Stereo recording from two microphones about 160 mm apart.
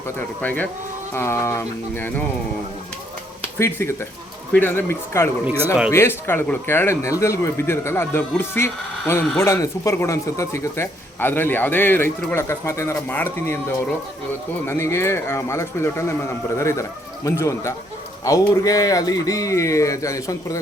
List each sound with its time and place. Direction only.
0.4 s speech: 10° left (ahead or behind)
3.6 s speech: 15° left (ahead or behind)
5.5 s speech: 10° right (ahead or behind)
5.9 s speech: 15° left (ahead or behind)